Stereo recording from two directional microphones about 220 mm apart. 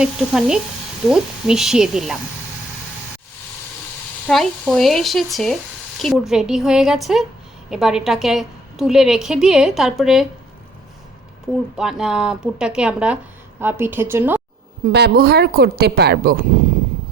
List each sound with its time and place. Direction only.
0.0 s a woman's voice: 5° right (ahead or behind)
4.3 s a woman's voice: centre (ahead or behind)
11.8 s a woman's voice: centre (ahead or behind)
14.9 s a woman's voice: 45° right (ahead or behind)